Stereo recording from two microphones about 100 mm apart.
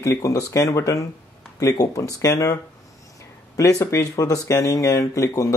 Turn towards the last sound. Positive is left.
turn(degrees=35)  # may be behind; listen again after turning